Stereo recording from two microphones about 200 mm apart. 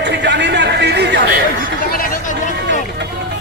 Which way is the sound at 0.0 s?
60° right (ahead or behind).